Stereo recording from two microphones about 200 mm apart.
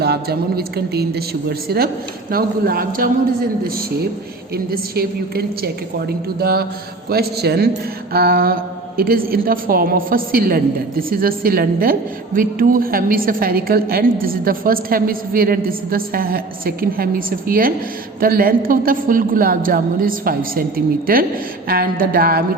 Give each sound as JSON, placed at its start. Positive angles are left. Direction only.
{"t": 0.0, "sound": "a woman's voice", "side_deg": -50}